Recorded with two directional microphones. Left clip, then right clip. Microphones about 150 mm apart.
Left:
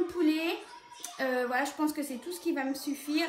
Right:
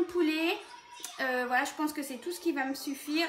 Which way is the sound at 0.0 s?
20° right (ahead or behind).